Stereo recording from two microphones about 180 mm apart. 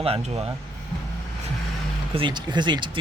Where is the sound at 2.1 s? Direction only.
25° right (ahead or behind).